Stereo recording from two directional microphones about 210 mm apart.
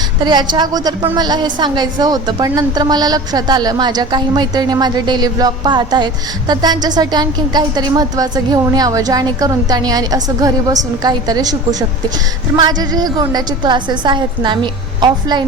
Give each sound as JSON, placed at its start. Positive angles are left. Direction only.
{"t": 0.2, "sound": "a woman's voice", "side_deg": -20}